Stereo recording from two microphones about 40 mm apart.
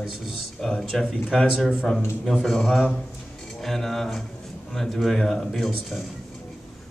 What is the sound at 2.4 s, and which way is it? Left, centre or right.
Speech, centre.